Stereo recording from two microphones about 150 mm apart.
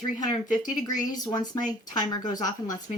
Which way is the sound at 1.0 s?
25° left (ahead or behind).